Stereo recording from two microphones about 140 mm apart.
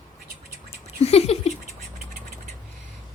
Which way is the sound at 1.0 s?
45° left (ahead or behind).